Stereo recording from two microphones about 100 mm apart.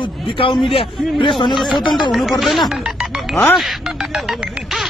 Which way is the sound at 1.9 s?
Centre (ahead or behind).